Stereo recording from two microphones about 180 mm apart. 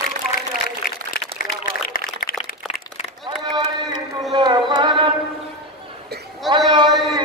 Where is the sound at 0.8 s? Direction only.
55° left (ahead or behind).